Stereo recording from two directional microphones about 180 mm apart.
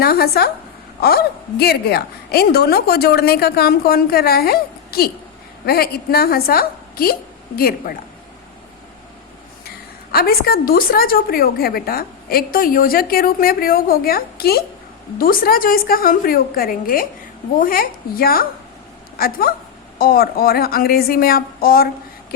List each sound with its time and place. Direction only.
0.0 s a woman's voice: 60° left (ahead or behind)
9.6 s a woman's voice: 60° left (ahead or behind)